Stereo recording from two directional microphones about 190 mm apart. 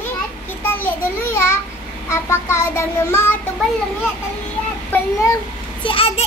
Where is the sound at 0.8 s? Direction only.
10° left (ahead or behind).